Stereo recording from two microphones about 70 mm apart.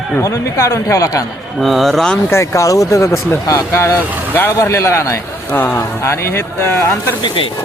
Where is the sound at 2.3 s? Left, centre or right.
Left.